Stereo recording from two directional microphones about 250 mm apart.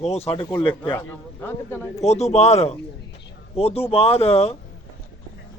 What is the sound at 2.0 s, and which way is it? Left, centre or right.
Speech, left.